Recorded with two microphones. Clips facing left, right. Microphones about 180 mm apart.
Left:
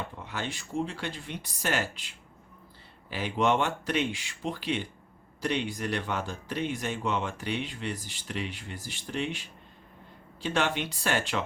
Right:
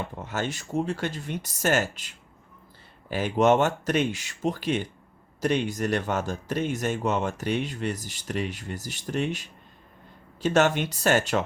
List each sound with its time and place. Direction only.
0.2 s speech: 45° right (ahead or behind)